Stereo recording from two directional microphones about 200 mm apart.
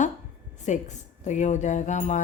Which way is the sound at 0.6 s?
35° left (ahead or behind).